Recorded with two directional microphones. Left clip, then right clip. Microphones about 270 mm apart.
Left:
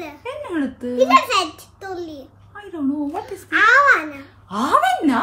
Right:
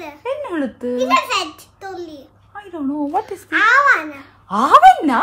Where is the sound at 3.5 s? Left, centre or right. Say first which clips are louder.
Even; centre.